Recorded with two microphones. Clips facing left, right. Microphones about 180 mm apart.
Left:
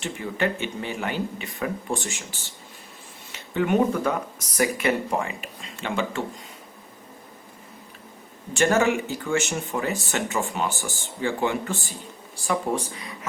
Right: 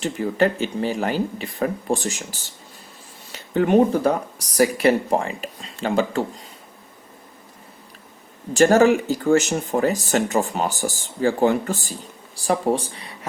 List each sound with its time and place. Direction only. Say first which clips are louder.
0.0 s speech: right 6 dB; 40° right (ahead or behind)
8.5 s speech: right 6 dB; 35° right (ahead or behind)